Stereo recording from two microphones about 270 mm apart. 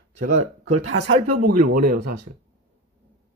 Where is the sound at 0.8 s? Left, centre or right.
Right.